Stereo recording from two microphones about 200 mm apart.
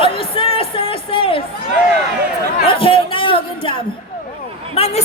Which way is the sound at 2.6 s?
25° left (ahead or behind).